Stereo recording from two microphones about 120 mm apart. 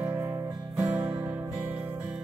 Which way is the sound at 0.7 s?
10° right (ahead or behind).